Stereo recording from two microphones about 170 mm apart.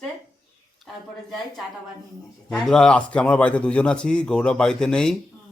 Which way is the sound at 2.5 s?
5° left (ahead or behind).